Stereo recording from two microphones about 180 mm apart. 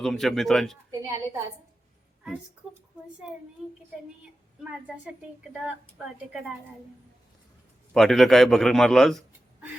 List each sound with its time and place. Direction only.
0.0 s a man's voice: centre (ahead or behind)
0.9 s a woman's voice: 20° right (ahead or behind)
4.6 s a woman's voice: 5° right (ahead or behind)
7.9 s a man's voice: centre (ahead or behind)